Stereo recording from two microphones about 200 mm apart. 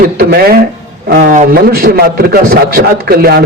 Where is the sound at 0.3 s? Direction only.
50° right (ahead or behind).